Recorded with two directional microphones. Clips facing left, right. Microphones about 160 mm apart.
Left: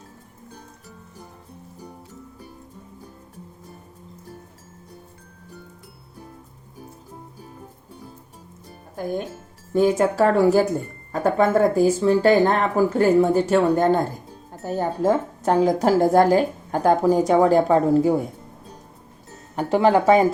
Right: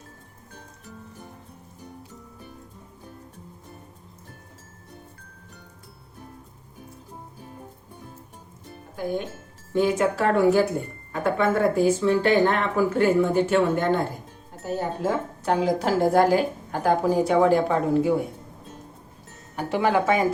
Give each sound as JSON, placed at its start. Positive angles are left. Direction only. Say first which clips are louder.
{"t": 9.7, "sound": "speech", "louder": "left 4 dB", "side_deg": 40}
{"t": 19.5, "sound": "speech", "louder": "left 5 dB", "side_deg": 35}